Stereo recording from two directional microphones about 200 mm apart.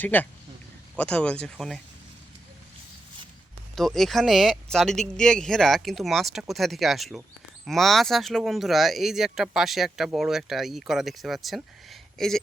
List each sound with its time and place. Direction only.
0.0 s speech: 10° left (ahead or behind)
3.8 s speech: centre (ahead or behind)